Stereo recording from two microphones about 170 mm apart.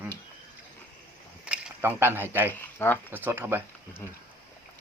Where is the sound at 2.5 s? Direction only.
10° left (ahead or behind).